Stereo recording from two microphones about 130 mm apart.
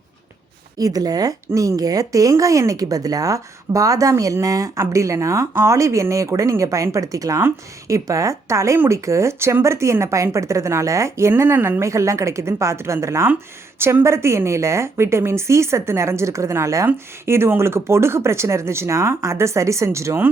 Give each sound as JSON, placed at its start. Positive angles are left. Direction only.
{"t": 0.8, "sound": "a woman's voice", "side_deg": -30}